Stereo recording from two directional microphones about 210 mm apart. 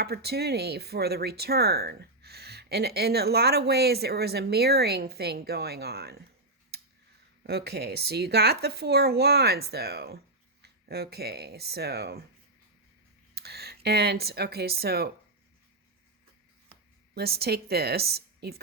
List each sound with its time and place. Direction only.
0.0 s speech: 50° right (ahead or behind)
7.4 s speech: 50° right (ahead or behind)
13.3 s speech: 50° right (ahead or behind)
17.2 s speech: 50° right (ahead or behind)